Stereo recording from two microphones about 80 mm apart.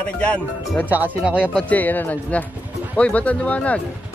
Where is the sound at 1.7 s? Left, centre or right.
Left.